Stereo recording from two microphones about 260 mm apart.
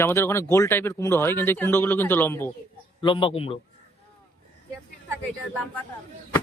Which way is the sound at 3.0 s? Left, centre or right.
Centre.